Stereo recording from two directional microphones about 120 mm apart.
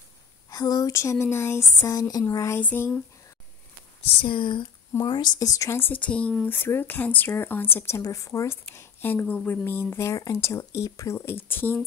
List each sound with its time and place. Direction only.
0.5 s a woman's voice: 30° left (ahead or behind); by 3.0 s 15° left (ahead or behind)
4.2 s a woman's voice: 45° left (ahead or behind); by 11.8 s 15° left (ahead or behind)